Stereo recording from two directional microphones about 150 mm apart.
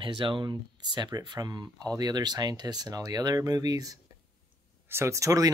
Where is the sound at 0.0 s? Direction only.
35° right (ahead or behind).